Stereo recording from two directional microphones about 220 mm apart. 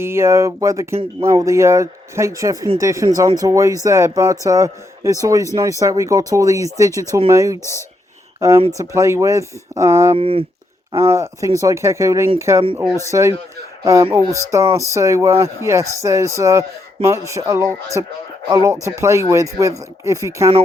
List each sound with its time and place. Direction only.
0.0 s speech: 10° right (ahead or behind)
7.6 s speech: 15° left (ahead or behind)
8.8 s speech: 15° right (ahead or behind)
10.2 s speech: 25° right (ahead or behind)
10.9 s speech: 10° right (ahead or behind)